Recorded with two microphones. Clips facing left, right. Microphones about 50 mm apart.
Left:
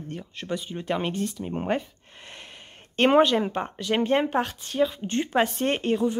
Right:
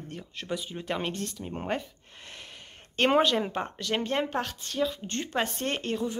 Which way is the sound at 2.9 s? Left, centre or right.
Centre.